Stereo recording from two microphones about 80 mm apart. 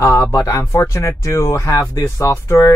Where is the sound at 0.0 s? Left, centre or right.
Left.